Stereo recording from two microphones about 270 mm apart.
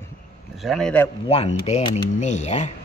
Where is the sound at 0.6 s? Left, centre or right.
Centre.